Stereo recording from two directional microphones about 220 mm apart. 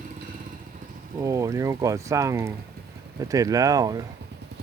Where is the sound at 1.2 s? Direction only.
15° right (ahead or behind).